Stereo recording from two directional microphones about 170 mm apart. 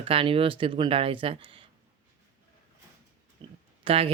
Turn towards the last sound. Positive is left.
turn(degrees=-35)  # may be behind; listen again after turning